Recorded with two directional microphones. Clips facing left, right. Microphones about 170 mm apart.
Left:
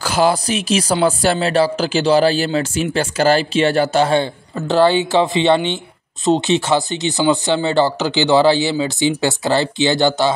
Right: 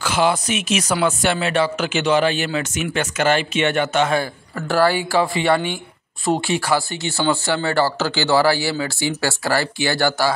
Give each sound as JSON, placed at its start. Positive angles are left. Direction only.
{"t": 0.0, "sound": "speech", "side_deg": 40}